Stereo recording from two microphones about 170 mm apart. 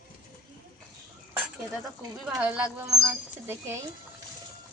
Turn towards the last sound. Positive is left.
turn(degrees=-15)  # may be behind; listen again after turning